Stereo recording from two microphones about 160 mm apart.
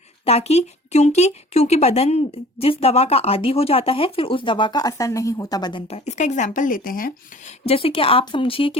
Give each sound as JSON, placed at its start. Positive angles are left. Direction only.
{"t": 0.3, "sound": "a woman's voice", "side_deg": 40}
{"t": 5.9, "sound": "speech", "side_deg": 45}
{"t": 7.6, "sound": "a woman's voice", "side_deg": 35}